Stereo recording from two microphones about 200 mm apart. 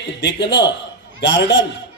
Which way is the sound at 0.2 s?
60° left (ahead or behind).